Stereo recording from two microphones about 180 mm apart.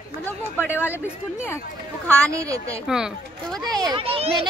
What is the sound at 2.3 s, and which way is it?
Speech, 15° right (ahead or behind).